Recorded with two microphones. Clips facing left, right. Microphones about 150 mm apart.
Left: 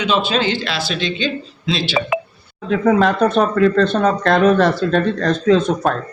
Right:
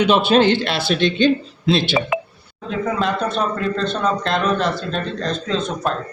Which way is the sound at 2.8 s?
60° left (ahead or behind).